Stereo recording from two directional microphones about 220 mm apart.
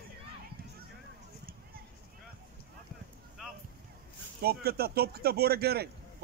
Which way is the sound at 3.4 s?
Centre (ahead or behind).